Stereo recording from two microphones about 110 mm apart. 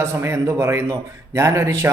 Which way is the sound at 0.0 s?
25° right (ahead or behind).